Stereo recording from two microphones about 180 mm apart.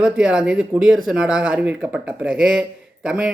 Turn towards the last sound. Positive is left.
turn(degrees=-5)  # may be behind; listen again after turning